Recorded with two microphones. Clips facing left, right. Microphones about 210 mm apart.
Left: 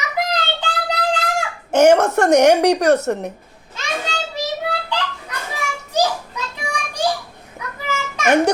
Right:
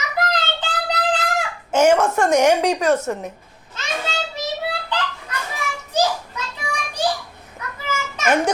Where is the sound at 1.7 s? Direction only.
65° left (ahead or behind).